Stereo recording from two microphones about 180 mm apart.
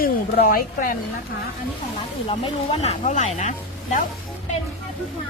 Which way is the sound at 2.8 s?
40° left (ahead or behind).